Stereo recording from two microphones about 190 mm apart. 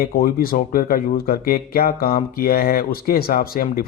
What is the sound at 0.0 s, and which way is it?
Speech, 50° left (ahead or behind).